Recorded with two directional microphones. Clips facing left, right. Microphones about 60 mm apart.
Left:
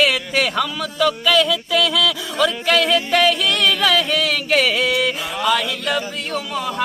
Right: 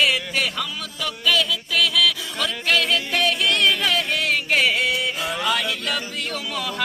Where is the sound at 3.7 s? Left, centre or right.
Left.